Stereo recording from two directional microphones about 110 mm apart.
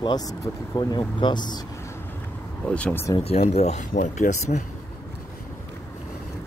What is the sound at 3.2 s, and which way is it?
Speech, 80° left.